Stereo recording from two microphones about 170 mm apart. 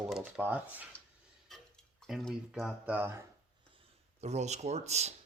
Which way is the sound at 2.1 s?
Centre (ahead or behind).